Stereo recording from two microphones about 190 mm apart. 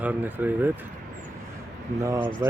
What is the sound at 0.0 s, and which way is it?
Speech, 10° right (ahead or behind).